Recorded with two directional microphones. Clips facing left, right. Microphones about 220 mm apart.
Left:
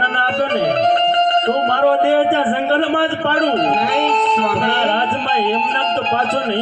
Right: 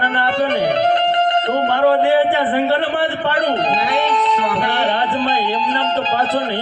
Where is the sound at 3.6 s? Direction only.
50° left (ahead or behind).